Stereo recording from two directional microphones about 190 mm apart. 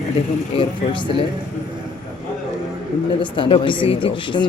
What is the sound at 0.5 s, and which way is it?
Speech, 25° left (ahead or behind).